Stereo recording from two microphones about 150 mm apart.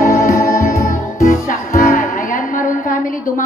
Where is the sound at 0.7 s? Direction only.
55° left (ahead or behind).